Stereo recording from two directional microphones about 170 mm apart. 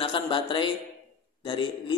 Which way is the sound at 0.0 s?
30° left (ahead or behind).